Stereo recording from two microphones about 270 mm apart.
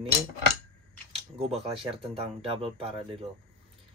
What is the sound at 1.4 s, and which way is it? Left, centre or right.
Speech, right.